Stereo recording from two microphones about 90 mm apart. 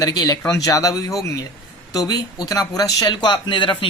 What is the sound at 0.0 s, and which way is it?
Speech, 40° left (ahead or behind).